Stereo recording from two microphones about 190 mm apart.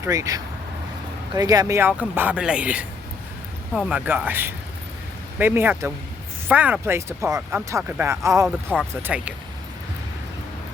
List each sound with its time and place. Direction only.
0.0 s speech: 15° right (ahead or behind)